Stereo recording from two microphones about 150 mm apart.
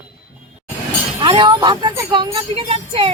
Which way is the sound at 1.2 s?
35° right (ahead or behind).